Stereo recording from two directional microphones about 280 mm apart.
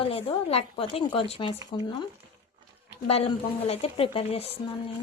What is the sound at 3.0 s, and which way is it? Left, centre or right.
A woman's voice, left.